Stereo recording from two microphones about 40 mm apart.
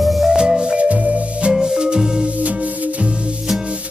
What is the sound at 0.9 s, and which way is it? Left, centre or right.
Music, right.